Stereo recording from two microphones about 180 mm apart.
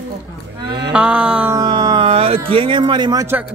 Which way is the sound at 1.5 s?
20° right (ahead or behind).